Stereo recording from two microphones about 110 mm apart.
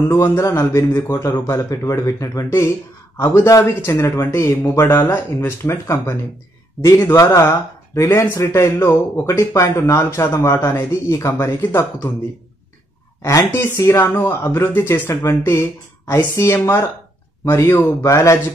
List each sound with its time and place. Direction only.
0.2 s speech: 25° left (ahead or behind)
13.2 s speech: 30° left (ahead or behind)